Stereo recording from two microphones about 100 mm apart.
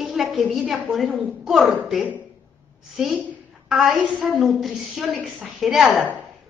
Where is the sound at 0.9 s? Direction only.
5° right (ahead or behind).